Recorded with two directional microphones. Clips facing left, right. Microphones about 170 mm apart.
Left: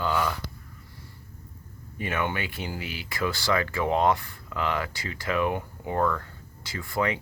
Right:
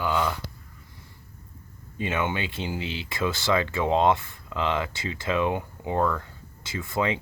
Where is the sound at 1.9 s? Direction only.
20° right (ahead or behind).